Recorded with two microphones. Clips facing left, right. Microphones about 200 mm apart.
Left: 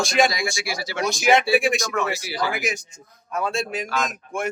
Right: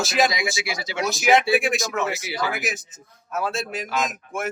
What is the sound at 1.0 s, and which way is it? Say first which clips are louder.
Speech: even; centre (ahead or behind).